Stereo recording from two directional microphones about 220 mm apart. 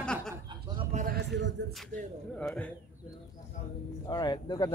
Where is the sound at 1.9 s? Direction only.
40° right (ahead or behind).